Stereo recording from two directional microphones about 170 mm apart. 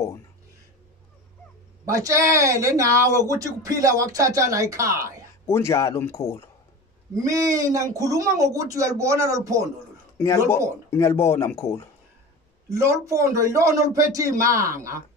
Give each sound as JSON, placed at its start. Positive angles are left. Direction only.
{"t": 1.9, "sound": "speech", "side_deg": -20}
{"t": 5.5, "sound": "speech", "side_deg": 15}
{"t": 7.2, "sound": "speech", "side_deg": -20}
{"t": 10.1, "sound": "speech", "side_deg": 15}
{"t": 12.6, "sound": "speech", "side_deg": -15}